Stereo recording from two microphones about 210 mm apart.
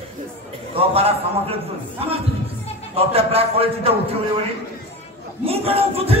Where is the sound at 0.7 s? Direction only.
30° right (ahead or behind).